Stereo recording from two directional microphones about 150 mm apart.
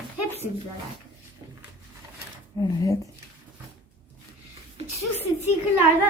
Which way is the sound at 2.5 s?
25° left (ahead or behind).